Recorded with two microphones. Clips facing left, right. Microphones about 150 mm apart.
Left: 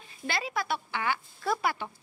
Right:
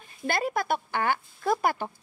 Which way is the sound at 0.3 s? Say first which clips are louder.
Right 5 dB; 50° right (ahead or behind).